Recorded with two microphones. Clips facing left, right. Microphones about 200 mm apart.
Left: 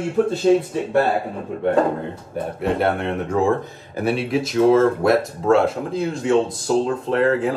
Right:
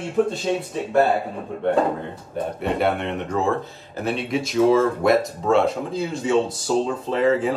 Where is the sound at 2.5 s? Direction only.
Centre (ahead or behind).